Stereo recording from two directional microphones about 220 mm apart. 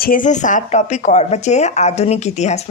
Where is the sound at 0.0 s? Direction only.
40° left (ahead or behind).